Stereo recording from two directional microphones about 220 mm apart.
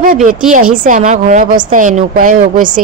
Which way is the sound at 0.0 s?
40° right (ahead or behind).